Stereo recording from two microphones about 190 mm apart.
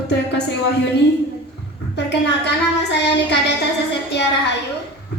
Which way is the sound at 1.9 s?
60° left (ahead or behind).